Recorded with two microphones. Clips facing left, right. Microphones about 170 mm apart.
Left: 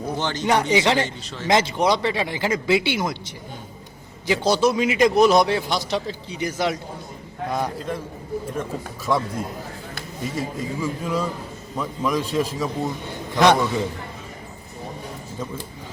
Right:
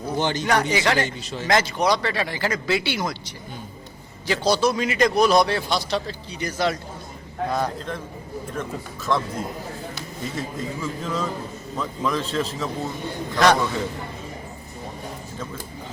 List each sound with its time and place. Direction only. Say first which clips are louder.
0.2 s speech: right 3 dB; 15° right (ahead or behind)
0.4 s speech: left 5 dB; 20° left (ahead or behind)
4.3 s a man's voice: left 2 dB; 20° left (ahead or behind)
9.1 s a man's voice: left 1 dB; 10° left (ahead or behind)
10.3 s a man's voice: left 3 dB; 10° left (ahead or behind)